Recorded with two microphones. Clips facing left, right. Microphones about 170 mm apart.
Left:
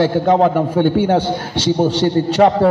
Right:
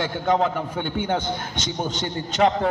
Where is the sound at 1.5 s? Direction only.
35° left (ahead or behind).